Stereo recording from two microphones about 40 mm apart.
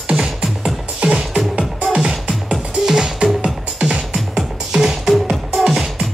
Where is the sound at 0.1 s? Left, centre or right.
Centre.